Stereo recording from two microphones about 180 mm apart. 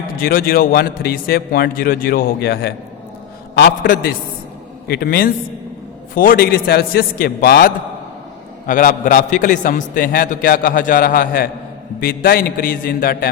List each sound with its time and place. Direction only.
0.2 s a man's voice: 55° left (ahead or behind)
8.6 s a man's voice: 50° left (ahead or behind)